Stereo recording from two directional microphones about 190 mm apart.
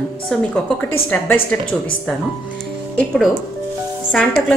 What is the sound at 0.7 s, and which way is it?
Speech, 10° left (ahead or behind).